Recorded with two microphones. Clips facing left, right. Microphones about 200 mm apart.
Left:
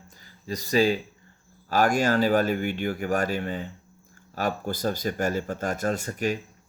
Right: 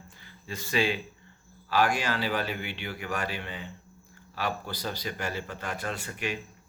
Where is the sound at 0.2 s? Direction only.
40° left (ahead or behind).